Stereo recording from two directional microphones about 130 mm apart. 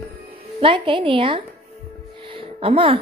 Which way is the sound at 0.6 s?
40° right (ahead or behind).